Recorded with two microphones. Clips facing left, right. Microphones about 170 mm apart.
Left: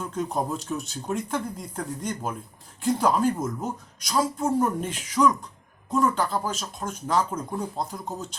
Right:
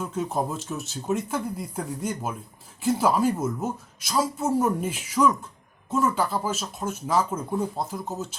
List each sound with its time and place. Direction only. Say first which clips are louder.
0.0 s speech: right 1 dB; 5° right (ahead or behind)